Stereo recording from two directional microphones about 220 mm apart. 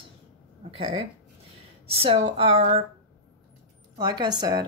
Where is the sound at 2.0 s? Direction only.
25° right (ahead or behind).